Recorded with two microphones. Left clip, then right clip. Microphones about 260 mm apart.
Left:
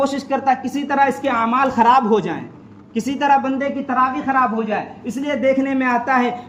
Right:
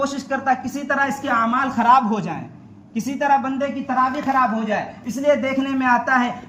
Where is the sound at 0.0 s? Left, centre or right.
Centre.